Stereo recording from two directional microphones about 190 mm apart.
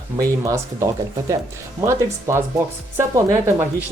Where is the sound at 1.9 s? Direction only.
15° right (ahead or behind).